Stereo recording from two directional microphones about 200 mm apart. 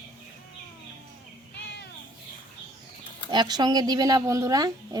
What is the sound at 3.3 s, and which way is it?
Speech, 20° right (ahead or behind).